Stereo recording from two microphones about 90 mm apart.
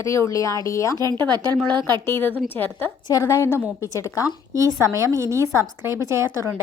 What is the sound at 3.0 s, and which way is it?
Speech, 45° left (ahead or behind).